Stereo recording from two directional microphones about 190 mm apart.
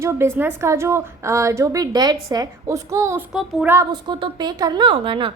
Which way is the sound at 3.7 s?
20° right (ahead or behind).